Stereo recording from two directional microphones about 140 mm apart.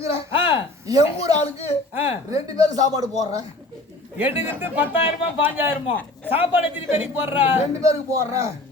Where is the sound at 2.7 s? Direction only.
25° right (ahead or behind).